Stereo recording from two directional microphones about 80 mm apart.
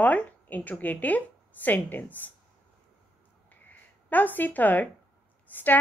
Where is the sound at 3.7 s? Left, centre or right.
Left.